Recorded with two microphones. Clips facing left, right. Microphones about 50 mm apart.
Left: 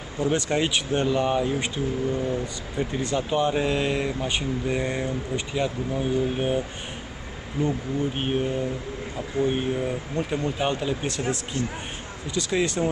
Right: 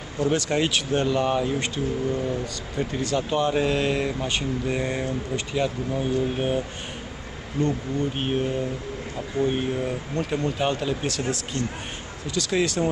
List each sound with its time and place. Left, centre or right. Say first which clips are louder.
0.2 s speech: right 1 dB; centre
7.6 s speech: right 1 dB; centre
12.4 s speech: right 1 dB; centre